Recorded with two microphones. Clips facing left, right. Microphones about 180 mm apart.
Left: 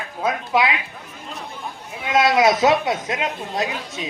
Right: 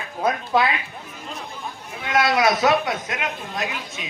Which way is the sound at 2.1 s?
20° left (ahead or behind).